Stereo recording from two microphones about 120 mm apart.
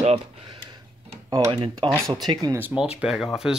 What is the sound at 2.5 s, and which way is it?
Speech, 15° right (ahead or behind).